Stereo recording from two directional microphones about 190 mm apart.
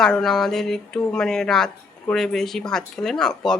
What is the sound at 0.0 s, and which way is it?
A woman's voice, 5° left (ahead or behind).